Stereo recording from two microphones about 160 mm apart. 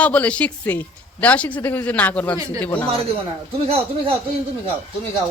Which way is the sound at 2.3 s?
20° right (ahead or behind).